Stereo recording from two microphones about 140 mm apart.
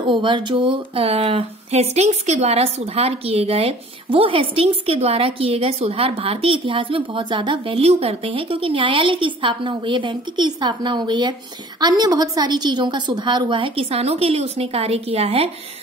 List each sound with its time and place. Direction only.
0.0 s a woman's voice: 35° right (ahead or behind)